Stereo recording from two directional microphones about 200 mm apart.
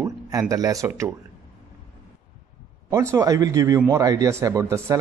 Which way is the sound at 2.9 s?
15° right (ahead or behind).